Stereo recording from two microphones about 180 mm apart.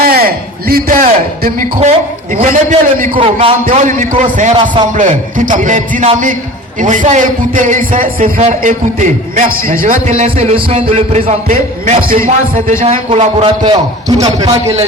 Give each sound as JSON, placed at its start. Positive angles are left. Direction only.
{"t": 0.0, "sound": "a man's voice", "side_deg": -55}
{"t": 3.4, "sound": "a man's voice", "side_deg": -30}
{"t": 3.8, "sound": "a man's voice", "side_deg": -45}
{"t": 12.8, "sound": "a man's voice", "side_deg": -35}